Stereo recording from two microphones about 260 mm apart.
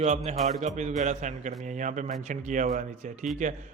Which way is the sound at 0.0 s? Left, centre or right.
Right.